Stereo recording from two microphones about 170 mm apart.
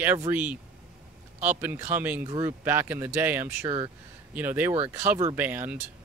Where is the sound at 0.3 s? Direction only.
10° right (ahead or behind).